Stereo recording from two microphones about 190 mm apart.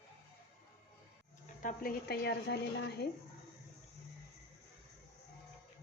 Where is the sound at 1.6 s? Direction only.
50° left (ahead or behind).